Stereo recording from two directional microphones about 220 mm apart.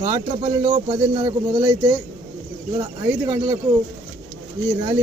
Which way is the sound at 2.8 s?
15° right (ahead or behind).